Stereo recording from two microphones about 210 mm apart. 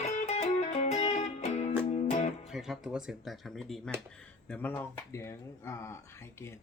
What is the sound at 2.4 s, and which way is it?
Speech, centre (ahead or behind).